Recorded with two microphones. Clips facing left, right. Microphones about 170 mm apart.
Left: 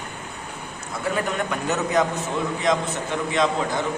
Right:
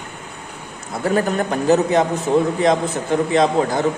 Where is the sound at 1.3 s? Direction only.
35° right (ahead or behind).